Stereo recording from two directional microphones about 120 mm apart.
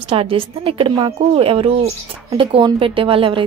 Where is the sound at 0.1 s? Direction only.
50° right (ahead or behind).